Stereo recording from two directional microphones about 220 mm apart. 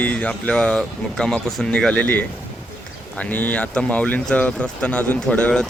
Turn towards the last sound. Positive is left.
turn(degrees=5)  # may be behind; listen again after turning